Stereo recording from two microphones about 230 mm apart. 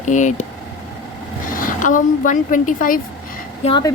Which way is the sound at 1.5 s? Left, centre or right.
Left.